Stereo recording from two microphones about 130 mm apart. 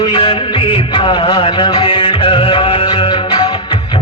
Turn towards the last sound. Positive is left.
turn(degrees=40)  # may be behind; listen again after turning